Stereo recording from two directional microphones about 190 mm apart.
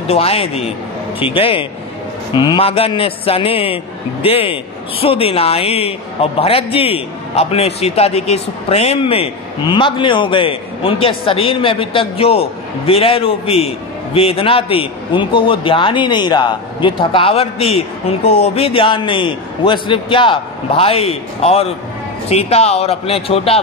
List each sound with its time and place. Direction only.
0.1 s a man's voice: 30° left (ahead or behind)